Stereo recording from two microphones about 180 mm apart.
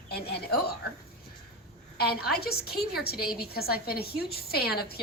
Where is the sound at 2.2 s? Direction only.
60° left (ahead or behind).